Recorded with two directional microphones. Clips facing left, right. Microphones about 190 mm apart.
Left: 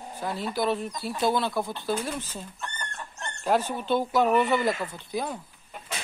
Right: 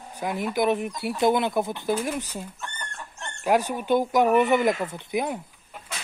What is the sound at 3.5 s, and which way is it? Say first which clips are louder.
Speech: right 3 dB; 10° right (ahead or behind).